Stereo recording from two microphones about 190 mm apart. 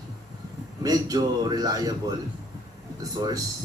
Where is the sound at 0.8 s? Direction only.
20° right (ahead or behind).